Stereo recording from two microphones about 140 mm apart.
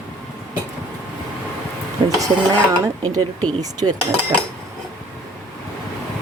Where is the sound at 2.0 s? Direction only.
35° right (ahead or behind).